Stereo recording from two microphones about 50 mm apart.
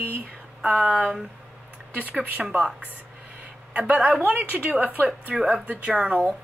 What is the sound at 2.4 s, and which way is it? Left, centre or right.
Speech, centre.